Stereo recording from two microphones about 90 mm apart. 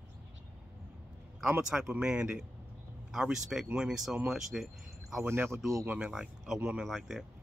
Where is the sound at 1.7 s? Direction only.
10° right (ahead or behind).